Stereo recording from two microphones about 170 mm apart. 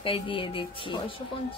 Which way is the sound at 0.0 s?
30° left (ahead or behind).